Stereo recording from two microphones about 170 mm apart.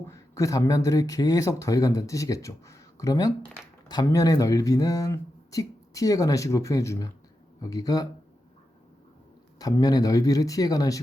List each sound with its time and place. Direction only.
0.1 s speech: 20° left (ahead or behind)
9.6 s speech: 20° left (ahead or behind)